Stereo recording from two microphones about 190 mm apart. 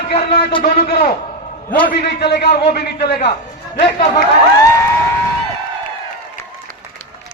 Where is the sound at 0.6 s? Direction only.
55° left (ahead or behind).